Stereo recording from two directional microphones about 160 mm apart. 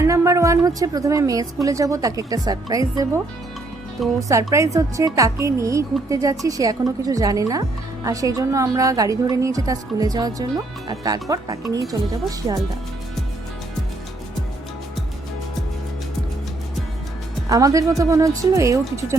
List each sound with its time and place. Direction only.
0.0 s a woman's voice: 20° right (ahead or behind)
4.2 s a woman's voice: 20° right (ahead or behind)
17.5 s a woman's voice: 20° right (ahead or behind)